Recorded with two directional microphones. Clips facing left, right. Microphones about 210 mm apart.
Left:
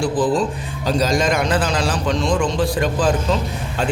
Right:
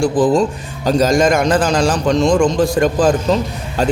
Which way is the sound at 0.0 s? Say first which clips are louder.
Right 5 dB; 45° right (ahead or behind).